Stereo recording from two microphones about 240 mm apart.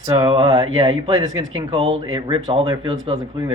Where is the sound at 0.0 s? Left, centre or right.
Centre.